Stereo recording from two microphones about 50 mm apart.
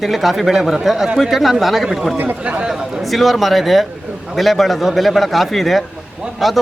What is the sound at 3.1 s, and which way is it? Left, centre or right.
A man's voice, centre.